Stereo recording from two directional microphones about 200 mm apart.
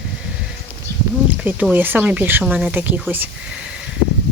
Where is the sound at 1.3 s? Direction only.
10° right (ahead or behind).